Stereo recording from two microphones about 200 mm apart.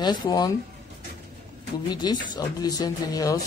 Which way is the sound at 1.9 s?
20° left (ahead or behind).